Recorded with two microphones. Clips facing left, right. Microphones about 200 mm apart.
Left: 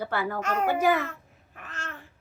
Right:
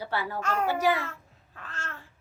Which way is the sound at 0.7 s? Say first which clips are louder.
Left 3 dB; 50° left (ahead or behind).